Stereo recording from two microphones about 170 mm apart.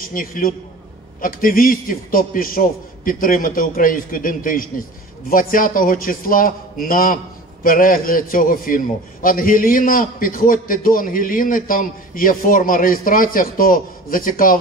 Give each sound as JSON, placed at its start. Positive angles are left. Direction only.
{"t": 0.1, "sound": "a man's voice", "side_deg": 55}